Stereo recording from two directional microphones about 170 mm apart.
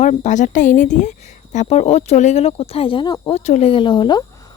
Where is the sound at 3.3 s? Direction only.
40° left (ahead or behind); by 4.5 s 25° left (ahead or behind).